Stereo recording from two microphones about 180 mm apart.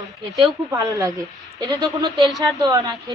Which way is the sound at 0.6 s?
15° right (ahead or behind).